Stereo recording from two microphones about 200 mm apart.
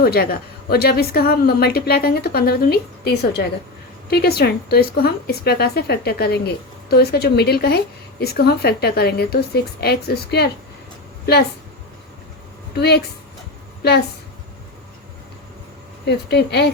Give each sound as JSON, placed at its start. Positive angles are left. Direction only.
{"t": 0.0, "sound": "a woman's voice", "side_deg": 50}
{"t": 12.7, "sound": "a woman's voice", "side_deg": 55}
{"t": 16.0, "sound": "speech", "side_deg": 55}